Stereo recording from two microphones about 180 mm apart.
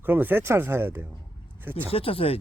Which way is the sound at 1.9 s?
30° left (ahead or behind).